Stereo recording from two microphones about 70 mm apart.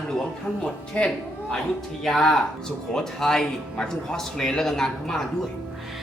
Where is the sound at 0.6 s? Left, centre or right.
Centre.